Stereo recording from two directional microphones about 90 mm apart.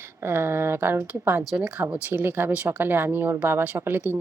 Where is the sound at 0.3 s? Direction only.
25° right (ahead or behind).